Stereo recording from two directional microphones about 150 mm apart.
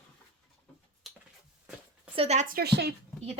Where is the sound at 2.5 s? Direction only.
90° right.